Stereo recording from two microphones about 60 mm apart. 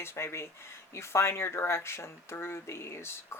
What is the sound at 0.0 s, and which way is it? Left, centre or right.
Speech, left.